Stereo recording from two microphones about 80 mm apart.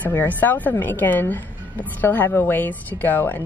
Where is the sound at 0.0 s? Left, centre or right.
Left.